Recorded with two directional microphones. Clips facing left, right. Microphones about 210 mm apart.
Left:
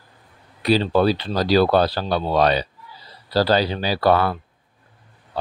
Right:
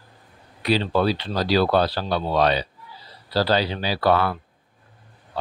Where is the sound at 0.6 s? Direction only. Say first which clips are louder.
Left 3 dB; 40° left (ahead or behind).